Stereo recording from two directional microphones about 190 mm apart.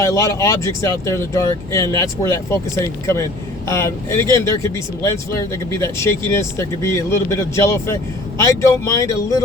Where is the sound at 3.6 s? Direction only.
15° left (ahead or behind).